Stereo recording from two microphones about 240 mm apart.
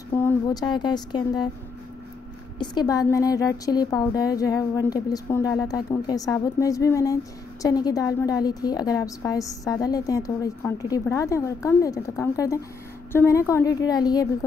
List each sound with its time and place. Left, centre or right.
0.1 s a woman's voice: centre
2.6 s a woman's voice: centre